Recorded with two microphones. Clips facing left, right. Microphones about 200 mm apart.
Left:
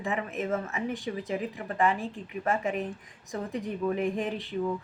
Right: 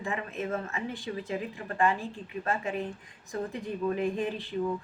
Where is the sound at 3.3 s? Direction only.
15° left (ahead or behind).